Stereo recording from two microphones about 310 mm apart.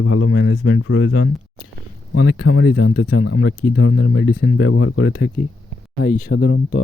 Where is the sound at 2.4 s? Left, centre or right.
Left.